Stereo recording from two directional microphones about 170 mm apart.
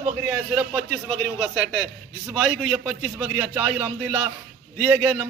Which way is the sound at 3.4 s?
10° right (ahead or behind).